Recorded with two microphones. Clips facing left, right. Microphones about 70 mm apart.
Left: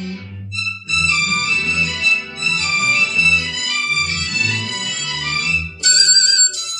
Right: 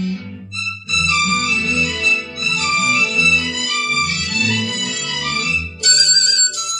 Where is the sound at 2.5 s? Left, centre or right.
Right.